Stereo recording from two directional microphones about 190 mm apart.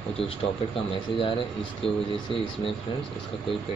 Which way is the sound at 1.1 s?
30° left (ahead or behind).